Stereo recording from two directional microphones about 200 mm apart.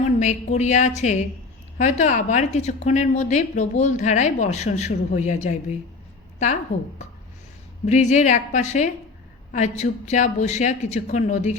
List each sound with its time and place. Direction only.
0.0 s a woman's voice: 35° left (ahead or behind)
7.9 s a woman's voice: 35° left (ahead or behind)